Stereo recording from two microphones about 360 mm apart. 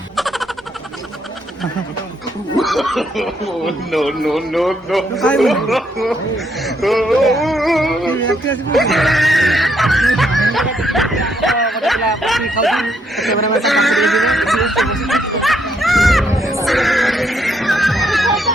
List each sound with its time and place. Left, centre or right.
0.2 s a sound: centre
2.6 s speech: centre
13.6 s snicker: centre